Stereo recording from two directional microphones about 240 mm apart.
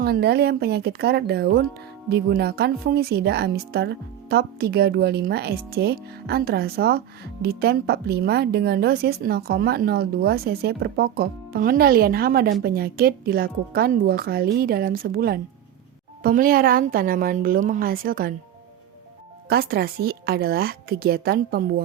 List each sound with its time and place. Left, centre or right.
0.0 s speech: right
19.5 s speech: right